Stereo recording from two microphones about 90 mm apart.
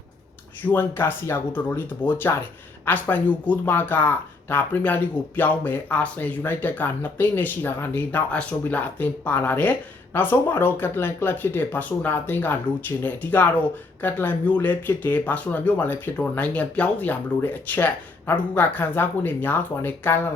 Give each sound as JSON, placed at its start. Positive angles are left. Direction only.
{"t": 0.6, "sound": "speech", "side_deg": 25}